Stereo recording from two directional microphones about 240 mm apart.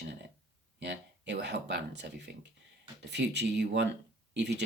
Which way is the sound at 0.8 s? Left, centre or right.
Right.